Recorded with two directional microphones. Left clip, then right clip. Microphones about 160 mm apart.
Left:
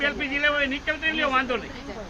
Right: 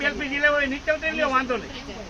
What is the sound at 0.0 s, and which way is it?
Speech, 50° right (ahead or behind).